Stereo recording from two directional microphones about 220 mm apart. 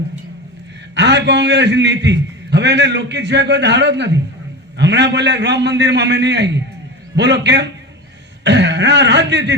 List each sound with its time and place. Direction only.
0.9 s a man's voice: 50° right (ahead or behind)